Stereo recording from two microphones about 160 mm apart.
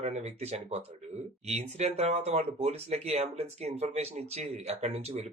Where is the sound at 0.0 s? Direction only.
45° right (ahead or behind).